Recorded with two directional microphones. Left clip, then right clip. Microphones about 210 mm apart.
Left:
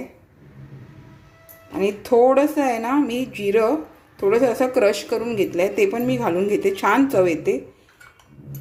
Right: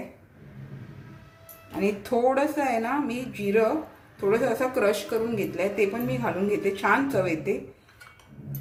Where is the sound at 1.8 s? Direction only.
35° left (ahead or behind).